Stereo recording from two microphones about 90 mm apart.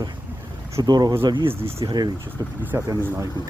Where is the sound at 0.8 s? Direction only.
45° right (ahead or behind).